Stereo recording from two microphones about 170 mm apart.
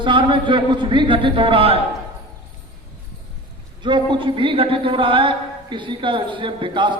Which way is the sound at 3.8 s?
30° right (ahead or behind).